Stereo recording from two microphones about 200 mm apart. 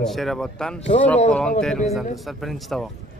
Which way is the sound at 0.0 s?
Centre (ahead or behind).